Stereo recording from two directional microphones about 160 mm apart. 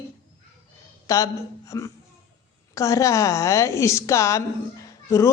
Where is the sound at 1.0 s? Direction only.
20° left (ahead or behind).